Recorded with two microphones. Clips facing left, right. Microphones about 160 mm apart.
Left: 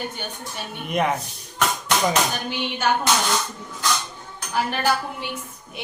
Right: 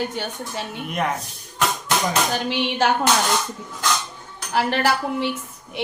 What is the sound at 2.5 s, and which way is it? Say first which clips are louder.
Speech: right 4 dB; 85° right.